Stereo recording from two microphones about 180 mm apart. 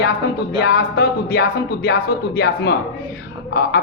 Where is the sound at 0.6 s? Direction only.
60° left (ahead or behind).